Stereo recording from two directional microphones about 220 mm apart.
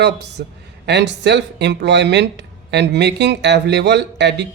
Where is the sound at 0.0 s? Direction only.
50° right (ahead or behind).